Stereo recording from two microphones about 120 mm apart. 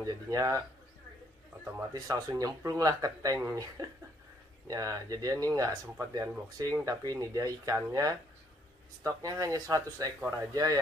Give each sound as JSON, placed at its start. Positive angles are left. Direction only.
{"t": 0.0, "sound": "speech", "side_deg": -30}
{"t": 1.9, "sound": "speech", "side_deg": -30}